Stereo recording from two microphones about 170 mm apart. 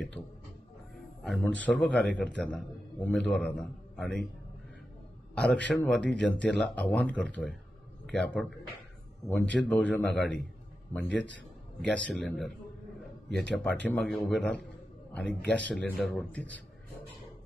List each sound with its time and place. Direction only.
1.2 s a man's voice: 5° left (ahead or behind)
5.3 s a man's voice: 5° left (ahead or behind)
11.1 s a man's voice: 90° right
12.2 s a man's voice: 5° left (ahead or behind)